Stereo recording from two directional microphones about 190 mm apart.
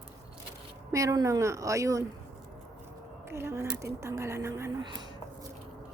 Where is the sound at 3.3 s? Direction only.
15° right (ahead or behind).